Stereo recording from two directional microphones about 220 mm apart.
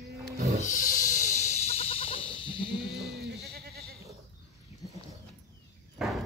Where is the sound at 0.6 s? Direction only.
35° left (ahead or behind).